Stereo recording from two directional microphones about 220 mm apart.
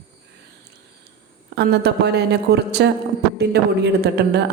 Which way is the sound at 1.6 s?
50° right (ahead or behind).